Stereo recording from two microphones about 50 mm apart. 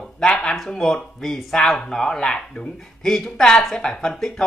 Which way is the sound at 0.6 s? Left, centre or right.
Centre.